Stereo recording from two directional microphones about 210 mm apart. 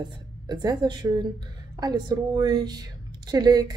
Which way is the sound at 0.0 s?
20° right (ahead or behind).